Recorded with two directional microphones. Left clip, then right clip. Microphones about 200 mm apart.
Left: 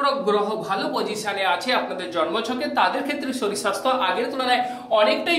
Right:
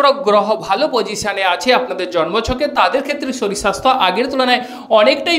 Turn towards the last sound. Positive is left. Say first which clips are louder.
# right 7 dB
turn(degrees=-35)  # may be behind; listen again after turning